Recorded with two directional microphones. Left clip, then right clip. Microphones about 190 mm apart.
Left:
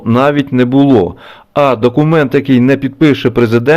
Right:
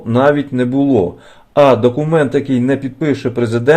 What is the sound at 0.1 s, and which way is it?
A man's voice, 25° left (ahead or behind).